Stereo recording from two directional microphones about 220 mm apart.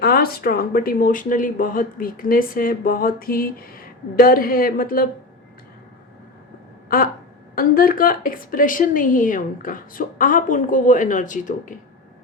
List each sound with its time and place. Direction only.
0.0 s speech: 45° left (ahead or behind)
6.8 s speech: 40° left (ahead or behind)